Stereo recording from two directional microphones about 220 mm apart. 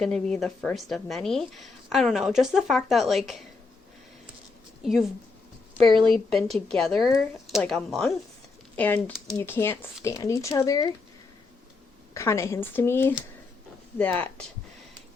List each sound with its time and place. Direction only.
0.0 s a woman's voice: 5° left (ahead or behind)
4.8 s a woman's voice: centre (ahead or behind)
5.8 s a woman's voice: 20° right (ahead or behind)
6.7 s a woman's voice: centre (ahead or behind)
12.1 s speech: 10° left (ahead or behind)